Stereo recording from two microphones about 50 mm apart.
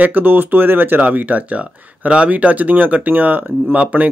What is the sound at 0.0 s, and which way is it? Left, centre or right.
Speech, right.